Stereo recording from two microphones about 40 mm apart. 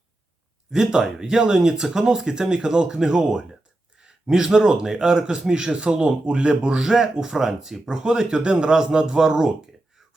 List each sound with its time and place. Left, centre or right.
0.7 s a man's voice: centre